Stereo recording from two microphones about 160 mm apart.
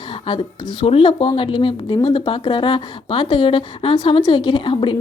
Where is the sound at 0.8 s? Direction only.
35° left (ahead or behind).